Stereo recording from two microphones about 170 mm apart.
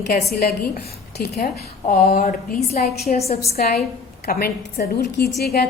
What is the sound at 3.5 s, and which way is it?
A woman's voice, 65° left (ahead or behind).